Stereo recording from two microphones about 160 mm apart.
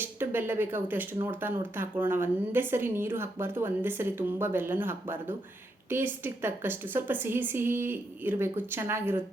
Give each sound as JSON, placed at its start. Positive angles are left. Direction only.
{"t": 0.0, "sound": "speech", "side_deg": -15}